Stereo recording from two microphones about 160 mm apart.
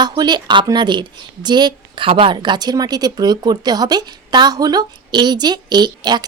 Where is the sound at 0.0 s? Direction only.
25° right (ahead or behind).